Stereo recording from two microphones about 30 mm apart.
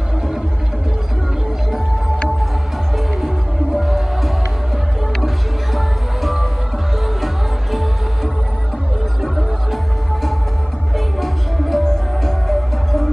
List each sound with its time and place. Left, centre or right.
3.7 s music: centre
5.8 s music: centre
7.7 s music: centre
11.1 s music: centre
11.8 s music: left
12.4 s music: centre